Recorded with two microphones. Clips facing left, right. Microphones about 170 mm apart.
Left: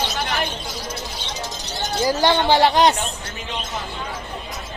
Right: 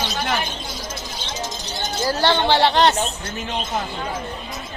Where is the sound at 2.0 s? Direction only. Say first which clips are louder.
Left 1 dB; 15° left (ahead or behind).